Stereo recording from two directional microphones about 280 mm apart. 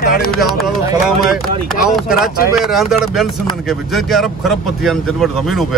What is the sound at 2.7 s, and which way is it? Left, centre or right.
Speech, centre.